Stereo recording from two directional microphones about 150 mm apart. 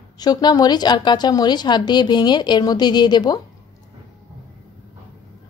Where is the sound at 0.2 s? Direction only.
25° left (ahead or behind).